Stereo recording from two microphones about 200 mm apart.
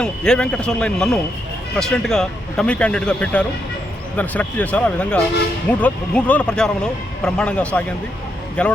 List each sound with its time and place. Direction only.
0.0 s speech: 5° left (ahead or behind)